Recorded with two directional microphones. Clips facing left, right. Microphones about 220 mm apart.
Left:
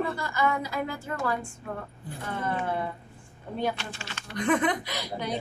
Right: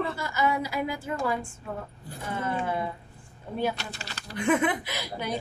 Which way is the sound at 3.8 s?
40° right (ahead or behind).